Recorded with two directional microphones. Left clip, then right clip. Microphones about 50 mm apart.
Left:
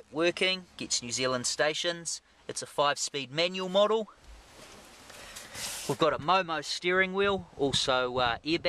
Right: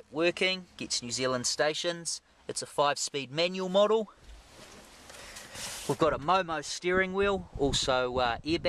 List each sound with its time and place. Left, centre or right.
0.1 s speech: centre; by 1.7 s right
1.7 s speech: right
5.5 s a sound: centre
5.9 s speech: right
6.9 s speech: right